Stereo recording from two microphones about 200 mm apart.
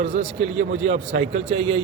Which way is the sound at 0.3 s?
75° right (ahead or behind).